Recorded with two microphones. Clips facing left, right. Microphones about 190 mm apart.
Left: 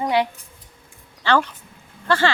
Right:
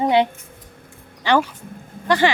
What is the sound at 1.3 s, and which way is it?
A woman's voice, 15° right (ahead or behind).